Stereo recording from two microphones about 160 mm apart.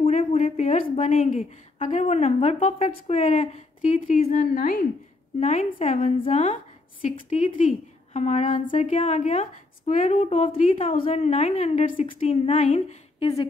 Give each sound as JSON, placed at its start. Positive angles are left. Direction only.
{"t": 0.0, "sound": "speech", "side_deg": 40}
{"t": 5.4, "sound": "a woman's voice", "side_deg": 45}